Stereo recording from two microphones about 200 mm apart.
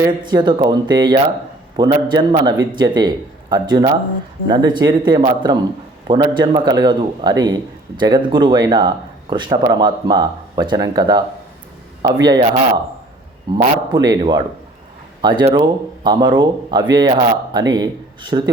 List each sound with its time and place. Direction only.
0.0 s a man's voice: 20° right (ahead or behind)
12.2 s a man's voice: 20° right (ahead or behind)